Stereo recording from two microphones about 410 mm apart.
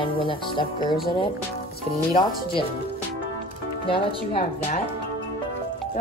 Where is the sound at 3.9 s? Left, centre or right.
Centre.